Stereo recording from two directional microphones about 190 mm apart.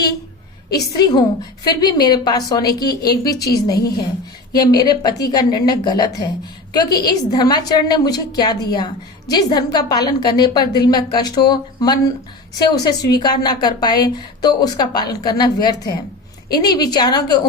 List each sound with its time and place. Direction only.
0.7 s a woman's voice: 20° left (ahead or behind)